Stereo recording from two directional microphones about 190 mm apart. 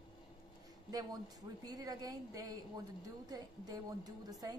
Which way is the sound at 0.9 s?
20° right (ahead or behind).